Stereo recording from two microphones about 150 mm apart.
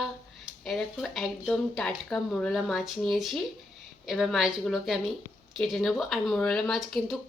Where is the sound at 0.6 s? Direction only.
Centre (ahead or behind).